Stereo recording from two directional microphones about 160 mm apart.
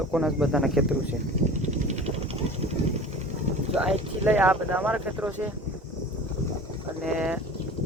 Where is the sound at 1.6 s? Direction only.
45° right (ahead or behind).